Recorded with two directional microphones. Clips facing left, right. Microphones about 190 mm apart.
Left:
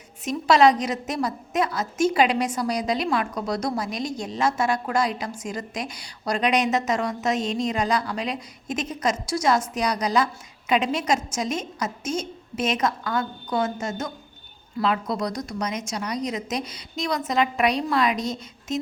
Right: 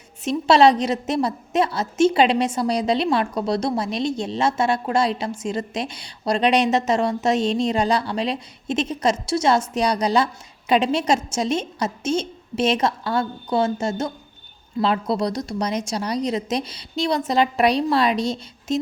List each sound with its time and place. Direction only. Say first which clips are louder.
0.3 s a woman's voice: right 3 dB; 30° right (ahead or behind)